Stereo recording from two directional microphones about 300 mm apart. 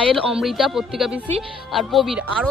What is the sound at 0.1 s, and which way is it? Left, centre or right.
Speech, centre.